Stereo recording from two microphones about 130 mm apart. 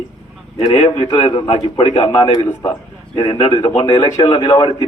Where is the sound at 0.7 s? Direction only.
50° left (ahead or behind).